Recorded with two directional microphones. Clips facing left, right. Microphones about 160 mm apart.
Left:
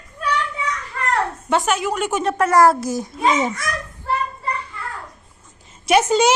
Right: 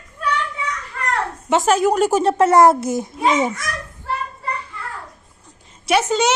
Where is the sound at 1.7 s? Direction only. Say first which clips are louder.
Right 6 dB; 40° right (ahead or behind); by 3.0 s 25° right (ahead or behind).